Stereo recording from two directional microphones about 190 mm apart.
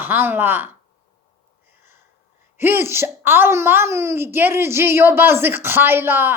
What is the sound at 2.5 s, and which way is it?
A woman's voice, 10° right (ahead or behind).